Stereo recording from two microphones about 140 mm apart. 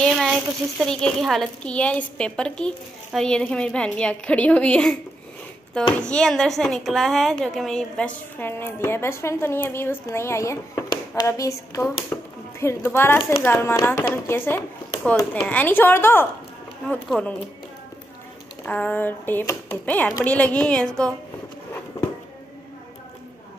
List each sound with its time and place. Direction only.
0.0 s a child's voice: centre (ahead or behind)
6.0 s a woman's voice: 5° left (ahead or behind)
8.4 s a child's voice: 15° left (ahead or behind)
18.7 s a child's voice: 10° left (ahead or behind)